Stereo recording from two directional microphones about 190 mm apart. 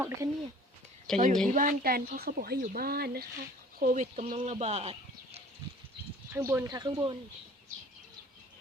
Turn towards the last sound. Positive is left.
turn(degrees=-20)  # may be behind; listen again after turning